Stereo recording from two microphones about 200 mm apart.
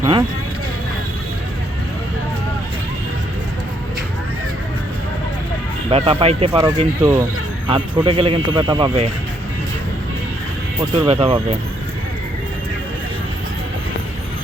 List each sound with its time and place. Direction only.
0.0 s speech: 20° right (ahead or behind)
5.9 s speech: 25° right (ahead or behind)
6.5 s speech: 15° right (ahead or behind)
11.0 s speech: 30° right (ahead or behind)